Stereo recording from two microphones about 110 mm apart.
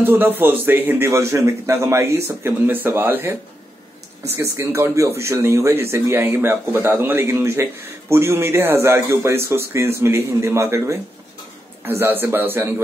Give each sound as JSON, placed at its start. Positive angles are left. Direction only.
{"t": 0.0, "sound": "a man's voice", "side_deg": -20}
{"t": 4.4, "sound": "a man's voice", "side_deg": -25}